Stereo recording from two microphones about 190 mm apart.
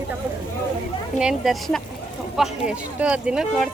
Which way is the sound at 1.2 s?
Centre (ahead or behind).